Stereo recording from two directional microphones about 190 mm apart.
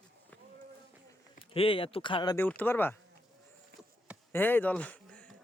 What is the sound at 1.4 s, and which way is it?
Speech, 30° left (ahead or behind).